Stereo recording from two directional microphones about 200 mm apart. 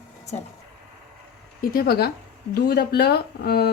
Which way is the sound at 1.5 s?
45° left (ahead or behind).